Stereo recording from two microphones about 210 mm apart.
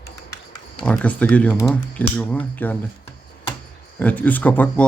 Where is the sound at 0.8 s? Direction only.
5° left (ahead or behind).